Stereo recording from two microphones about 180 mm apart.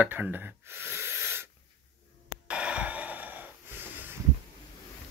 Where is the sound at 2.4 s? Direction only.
5° right (ahead or behind).